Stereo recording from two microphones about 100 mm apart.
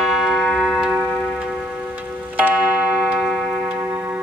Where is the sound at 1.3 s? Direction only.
5° right (ahead or behind).